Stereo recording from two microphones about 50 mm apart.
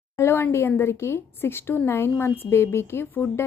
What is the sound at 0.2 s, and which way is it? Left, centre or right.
A woman's voice, left.